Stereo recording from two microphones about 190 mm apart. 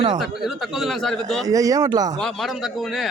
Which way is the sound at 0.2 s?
Centre (ahead or behind).